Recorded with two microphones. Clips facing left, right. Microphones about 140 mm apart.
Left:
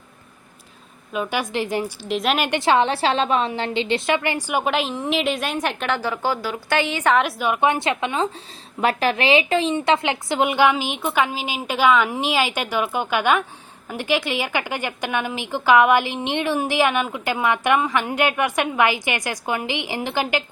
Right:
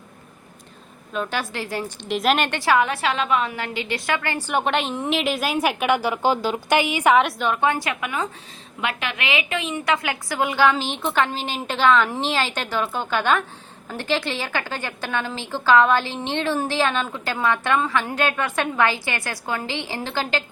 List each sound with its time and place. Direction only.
1.1 s a woman's voice: 10° left (ahead or behind)
2.0 s a woman's voice: centre (ahead or behind)
2.5 s a woman's voice: 20° left (ahead or behind); by 7.2 s 10° right (ahead or behind)
7.2 s a woman's voice: 5° left (ahead or behind); by 8.3 s 25° left (ahead or behind)
8.8 s a woman's voice: 40° left (ahead or behind); by 20.4 s 15° left (ahead or behind)